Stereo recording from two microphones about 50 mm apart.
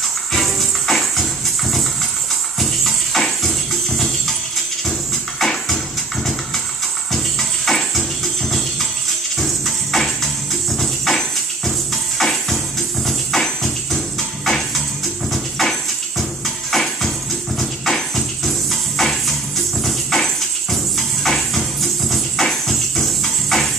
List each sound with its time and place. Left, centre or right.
0.3 s music: centre
5.4 s music: centre
7.1 s music: centre
15.3 s a sound: centre
17.6 s music: centre
19.8 s a sound: centre